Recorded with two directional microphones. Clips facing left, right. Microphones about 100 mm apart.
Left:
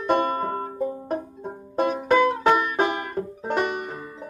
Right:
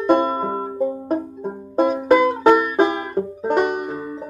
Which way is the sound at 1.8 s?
25° right (ahead or behind).